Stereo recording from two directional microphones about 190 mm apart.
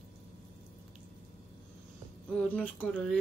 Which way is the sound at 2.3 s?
5° left (ahead or behind).